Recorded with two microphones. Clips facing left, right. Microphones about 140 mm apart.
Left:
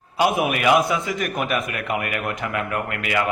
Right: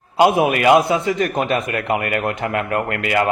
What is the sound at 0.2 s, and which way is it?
A man's voice, 30° right (ahead or behind).